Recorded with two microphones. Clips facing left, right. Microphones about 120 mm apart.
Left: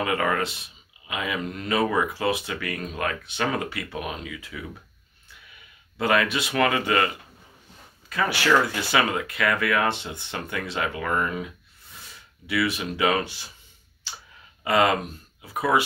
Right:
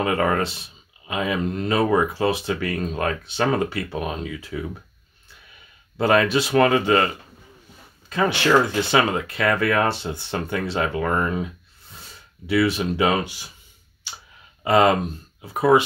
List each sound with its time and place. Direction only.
0.0 s speech: 35° right (ahead or behind)
5.9 s speech: 30° right (ahead or behind)
8.1 s speech: 25° right (ahead or behind)
12.4 s speech: 30° right (ahead or behind)
13.2 s speech: 15° right (ahead or behind)
14.6 s speech: 30° right (ahead or behind)